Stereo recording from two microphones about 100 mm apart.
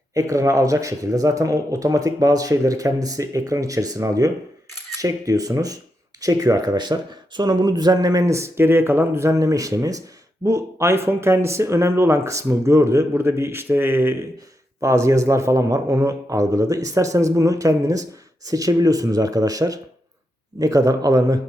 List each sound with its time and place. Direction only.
0.1 s a man's voice: 35° right (ahead or behind)